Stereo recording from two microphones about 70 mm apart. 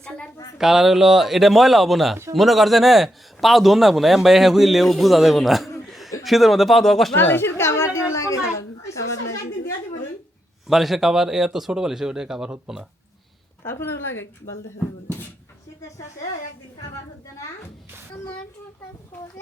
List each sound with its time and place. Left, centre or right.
0.6 s a man's voice: centre
7.2 s a sound: left
10.7 s speech: centre
13.7 s a woman's voice: left